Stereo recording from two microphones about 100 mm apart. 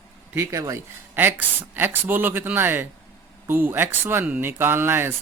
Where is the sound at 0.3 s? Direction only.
30° right (ahead or behind).